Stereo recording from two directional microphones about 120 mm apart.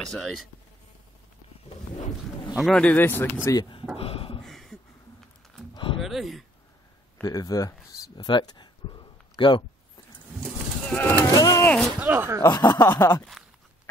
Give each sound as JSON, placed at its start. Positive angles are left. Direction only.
{"t": 0.0, "sound": "speech", "side_deg": 0}
{"t": 2.6, "sound": "speech", "side_deg": 10}
{"t": 3.4, "sound": "speech", "side_deg": 35}
{"t": 3.9, "sound": "a sound", "side_deg": 50}
{"t": 4.4, "sound": "a sound", "side_deg": 0}
{"t": 5.9, "sound": "speech", "side_deg": 0}
{"t": 7.2, "sound": "speech", "side_deg": 30}
{"t": 10.9, "sound": "speech", "side_deg": 15}
{"t": 11.3, "sound": "a sound", "side_deg": 30}
{"t": 11.6, "sound": "a sound", "side_deg": 10}
{"t": 12.0, "sound": "speech", "side_deg": -15}
{"t": 12.4, "sound": "snicker", "side_deg": 30}